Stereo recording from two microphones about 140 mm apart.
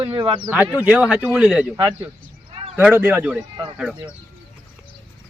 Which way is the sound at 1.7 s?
15° right (ahead or behind).